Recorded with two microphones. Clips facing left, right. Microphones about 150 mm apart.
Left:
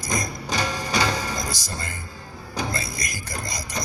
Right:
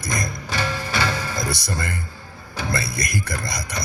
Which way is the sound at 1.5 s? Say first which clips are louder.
Right 6 dB; 60° right (ahead or behind).